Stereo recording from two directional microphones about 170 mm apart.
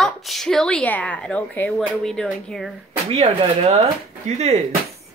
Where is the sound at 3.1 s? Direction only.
35° right (ahead or behind).